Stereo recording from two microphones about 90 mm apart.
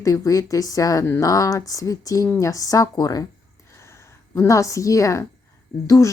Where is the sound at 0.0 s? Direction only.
40° left (ahead or behind).